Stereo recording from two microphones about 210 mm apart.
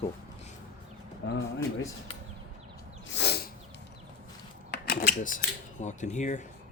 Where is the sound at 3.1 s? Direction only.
50° left (ahead or behind).